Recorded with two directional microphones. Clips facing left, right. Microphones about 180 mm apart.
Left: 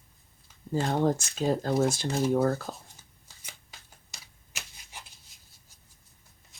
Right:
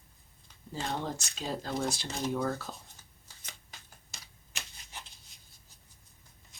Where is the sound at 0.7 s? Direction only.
55° left (ahead or behind).